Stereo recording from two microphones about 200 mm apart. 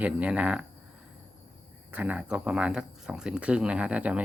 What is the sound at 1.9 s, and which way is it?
Speech, 5° right (ahead or behind).